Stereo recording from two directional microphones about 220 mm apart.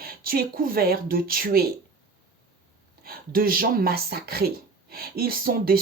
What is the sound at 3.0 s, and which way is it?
Speech, 40° right (ahead or behind).